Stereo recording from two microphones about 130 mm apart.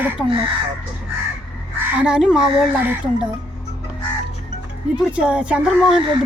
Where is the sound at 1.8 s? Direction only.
10° right (ahead or behind).